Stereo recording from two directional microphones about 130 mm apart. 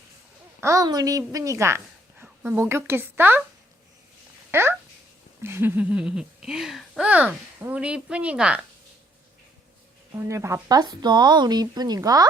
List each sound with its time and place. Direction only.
0.6 s a woman's voice: 25° right (ahead or behind)
4.5 s speech: 20° right (ahead or behind)
10.2 s speech: 20° right (ahead or behind)